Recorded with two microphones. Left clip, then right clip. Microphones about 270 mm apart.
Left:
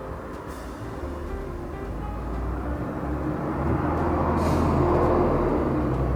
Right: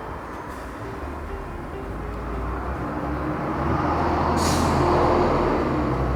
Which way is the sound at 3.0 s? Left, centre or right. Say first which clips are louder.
Right 2 dB; centre.